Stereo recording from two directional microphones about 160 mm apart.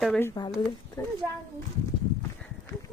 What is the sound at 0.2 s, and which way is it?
Speech, 15° left (ahead or behind).